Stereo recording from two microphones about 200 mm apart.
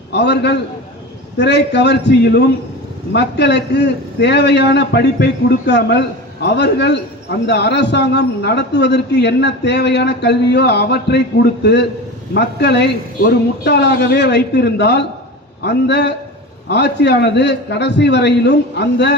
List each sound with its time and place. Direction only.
0.1 s a man's voice: 60° left (ahead or behind)